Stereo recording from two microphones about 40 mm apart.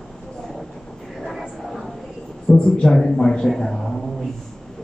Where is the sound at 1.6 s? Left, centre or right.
Centre.